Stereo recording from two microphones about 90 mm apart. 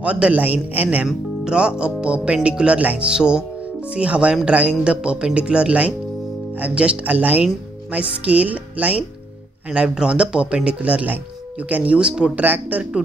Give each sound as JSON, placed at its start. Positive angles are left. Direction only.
{"t": 0.0, "sound": "speech", "side_deg": -15}